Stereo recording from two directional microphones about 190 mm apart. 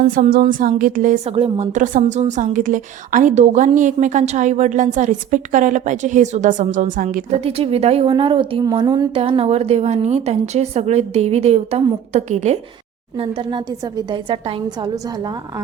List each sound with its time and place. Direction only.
0.1 s a woman's voice: 45° right (ahead or behind)
7.3 s a woman's voice: 30° right (ahead or behind)